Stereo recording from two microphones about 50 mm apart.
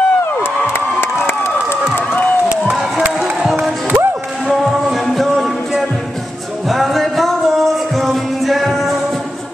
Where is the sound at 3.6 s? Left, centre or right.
Centre.